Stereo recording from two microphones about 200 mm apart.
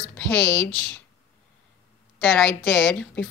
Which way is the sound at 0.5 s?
20° right (ahead or behind).